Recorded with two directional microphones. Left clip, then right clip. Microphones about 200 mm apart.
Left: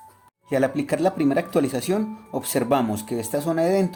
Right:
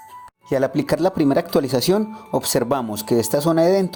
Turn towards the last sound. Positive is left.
turn(degrees=-35)  # may be behind; listen again after turning